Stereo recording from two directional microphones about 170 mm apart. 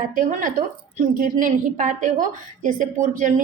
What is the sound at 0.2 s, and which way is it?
A woman's voice, 50° right (ahead or behind).